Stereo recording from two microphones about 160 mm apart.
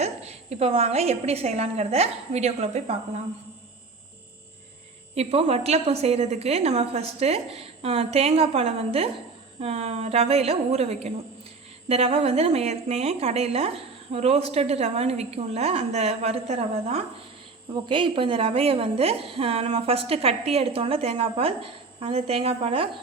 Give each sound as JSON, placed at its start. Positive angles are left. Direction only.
{"t": 0.0, "sound": "a woman's voice", "side_deg": -40}
{"t": 5.1, "sound": "a woman's voice", "side_deg": -40}
{"t": 17.8, "sound": "a woman's voice", "side_deg": -30}